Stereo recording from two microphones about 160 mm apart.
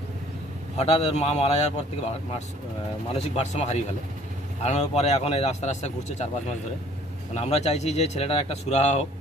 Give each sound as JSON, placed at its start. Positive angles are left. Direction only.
{"t": 0.7, "sound": "a man's voice", "side_deg": 40}
{"t": 3.1, "sound": "speech", "side_deg": 40}
{"t": 7.3, "sound": "speech", "side_deg": 40}